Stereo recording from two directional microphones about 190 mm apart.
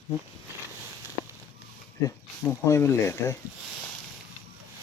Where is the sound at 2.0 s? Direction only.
15° left (ahead or behind).